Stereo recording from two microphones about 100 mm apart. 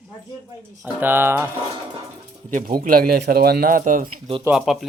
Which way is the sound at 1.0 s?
20° right (ahead or behind).